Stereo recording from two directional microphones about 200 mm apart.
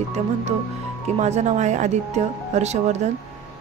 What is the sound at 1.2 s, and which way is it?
A woman's voice, 35° right (ahead or behind).